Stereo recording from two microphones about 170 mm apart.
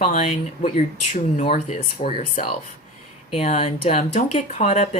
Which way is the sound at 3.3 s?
40° left (ahead or behind).